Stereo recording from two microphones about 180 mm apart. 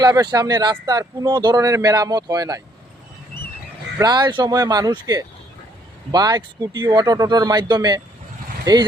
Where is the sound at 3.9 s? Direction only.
25° right (ahead or behind).